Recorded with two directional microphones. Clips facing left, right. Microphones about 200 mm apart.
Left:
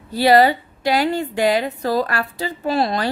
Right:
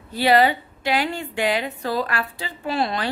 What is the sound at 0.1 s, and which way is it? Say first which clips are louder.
A woman's voice: left 4 dB; 40° left (ahead or behind).